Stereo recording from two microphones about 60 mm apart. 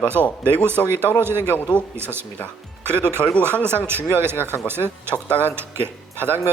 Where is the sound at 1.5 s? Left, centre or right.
Left.